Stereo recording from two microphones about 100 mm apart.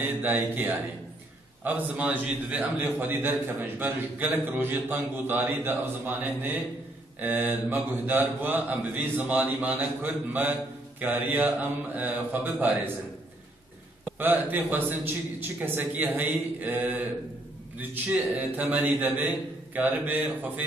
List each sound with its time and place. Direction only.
0.0 s a man's voice: 15° right (ahead or behind)
14.1 s a man's voice: 20° right (ahead or behind)